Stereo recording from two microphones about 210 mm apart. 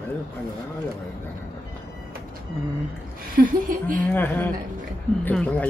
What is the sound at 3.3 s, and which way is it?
Speech, 40° right (ahead or behind).